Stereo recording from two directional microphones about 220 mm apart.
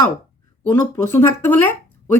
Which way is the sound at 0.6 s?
10° left (ahead or behind).